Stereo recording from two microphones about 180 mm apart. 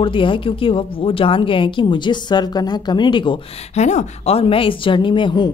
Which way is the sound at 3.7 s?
40° left (ahead or behind).